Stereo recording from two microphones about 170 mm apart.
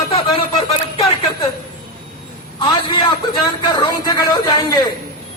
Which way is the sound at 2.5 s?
25° left (ahead or behind).